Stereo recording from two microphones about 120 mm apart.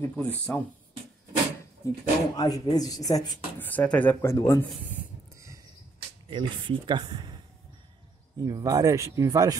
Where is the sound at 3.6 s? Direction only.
15° left (ahead or behind).